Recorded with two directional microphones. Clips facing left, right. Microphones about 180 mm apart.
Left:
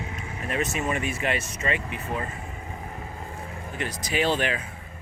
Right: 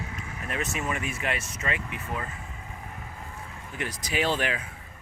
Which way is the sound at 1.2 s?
Centre (ahead or behind).